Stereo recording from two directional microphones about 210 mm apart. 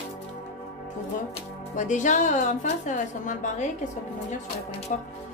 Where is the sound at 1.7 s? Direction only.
35° left (ahead or behind).